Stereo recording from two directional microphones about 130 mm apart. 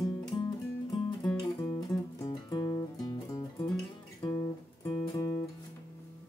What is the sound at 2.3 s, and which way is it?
Music, 35° left (ahead or behind).